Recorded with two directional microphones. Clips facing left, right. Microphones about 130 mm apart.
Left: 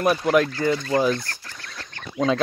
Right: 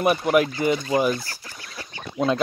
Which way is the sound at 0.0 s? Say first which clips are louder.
Even; 10° right (ahead or behind).